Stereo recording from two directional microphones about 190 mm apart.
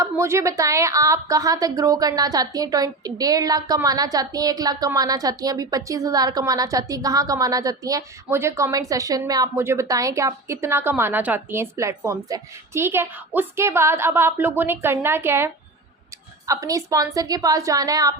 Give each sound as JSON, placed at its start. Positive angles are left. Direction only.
{"t": 0.0, "sound": "a woman's voice", "side_deg": -15}
{"t": 16.5, "sound": "a woman's voice", "side_deg": -15}